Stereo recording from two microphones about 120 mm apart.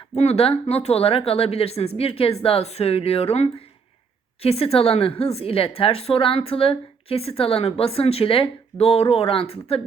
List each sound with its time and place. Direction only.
0.2 s a woman's voice: 60° left (ahead or behind)